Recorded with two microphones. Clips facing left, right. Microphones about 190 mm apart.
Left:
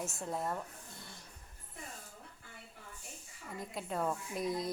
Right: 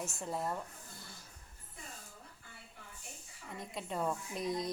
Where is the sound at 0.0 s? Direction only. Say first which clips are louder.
Even; centre (ahead or behind).